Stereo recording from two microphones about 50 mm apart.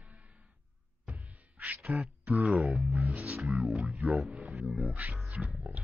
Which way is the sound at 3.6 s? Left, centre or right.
Centre.